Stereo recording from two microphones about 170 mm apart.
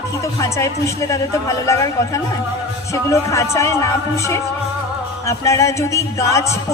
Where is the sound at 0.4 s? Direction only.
20° left (ahead or behind).